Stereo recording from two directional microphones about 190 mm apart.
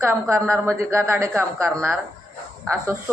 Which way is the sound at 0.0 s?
15° right (ahead or behind).